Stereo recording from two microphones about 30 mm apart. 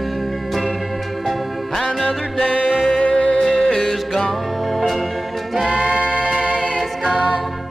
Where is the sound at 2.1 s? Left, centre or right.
Left.